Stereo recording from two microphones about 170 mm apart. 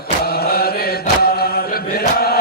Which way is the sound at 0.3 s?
65° left (ahead or behind).